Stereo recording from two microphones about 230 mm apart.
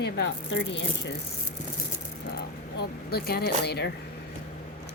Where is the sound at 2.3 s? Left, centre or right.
Left.